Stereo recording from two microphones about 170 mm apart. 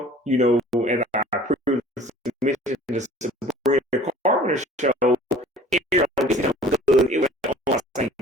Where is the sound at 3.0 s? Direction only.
45° right (ahead or behind).